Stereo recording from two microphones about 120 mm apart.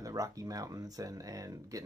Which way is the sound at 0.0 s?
30° right (ahead or behind).